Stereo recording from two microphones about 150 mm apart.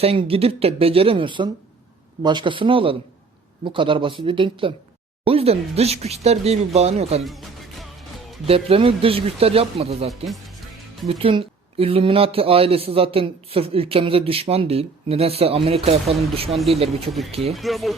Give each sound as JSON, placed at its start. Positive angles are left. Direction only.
{"t": 0.0, "sound": "speech", "side_deg": -40}
{"t": 7.3, "sound": "music", "side_deg": 0}
{"t": 8.4, "sound": "speech", "side_deg": -40}
{"t": 11.2, "sound": "speech", "side_deg": -40}
{"t": 17.1, "sound": "speech", "side_deg": 0}